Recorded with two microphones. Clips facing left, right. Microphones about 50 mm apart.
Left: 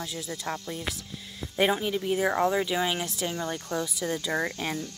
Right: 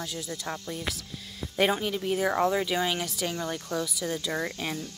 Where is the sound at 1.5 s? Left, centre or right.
Centre.